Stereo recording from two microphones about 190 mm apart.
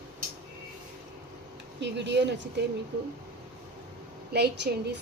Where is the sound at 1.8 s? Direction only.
65° right (ahead or behind).